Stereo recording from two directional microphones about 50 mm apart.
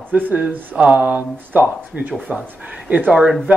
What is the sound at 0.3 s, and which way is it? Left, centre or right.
Speech, right.